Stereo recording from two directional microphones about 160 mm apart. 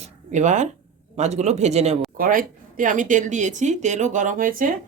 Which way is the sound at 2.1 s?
60° right (ahead or behind).